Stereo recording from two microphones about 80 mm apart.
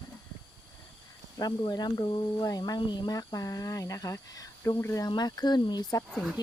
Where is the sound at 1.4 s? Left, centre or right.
Left.